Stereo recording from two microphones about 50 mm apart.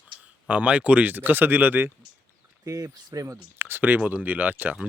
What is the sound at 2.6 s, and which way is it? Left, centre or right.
Speech, right.